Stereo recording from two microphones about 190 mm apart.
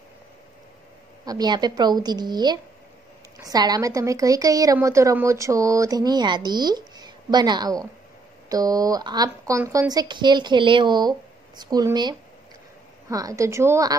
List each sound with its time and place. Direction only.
1.2 s a woman's voice: 20° right (ahead or behind)